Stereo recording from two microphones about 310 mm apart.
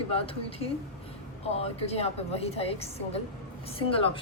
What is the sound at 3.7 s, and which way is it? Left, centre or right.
Speech, centre.